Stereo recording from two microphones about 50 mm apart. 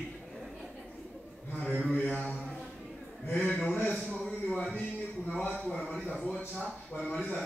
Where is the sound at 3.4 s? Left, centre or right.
Left.